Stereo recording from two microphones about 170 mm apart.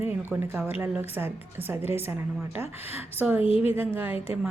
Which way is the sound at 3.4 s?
35° left (ahead or behind).